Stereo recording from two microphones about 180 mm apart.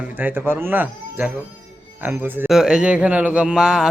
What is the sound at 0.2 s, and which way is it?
A man's voice, 10° right (ahead or behind).